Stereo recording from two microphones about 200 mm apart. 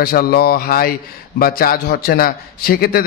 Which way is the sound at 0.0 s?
50° left (ahead or behind).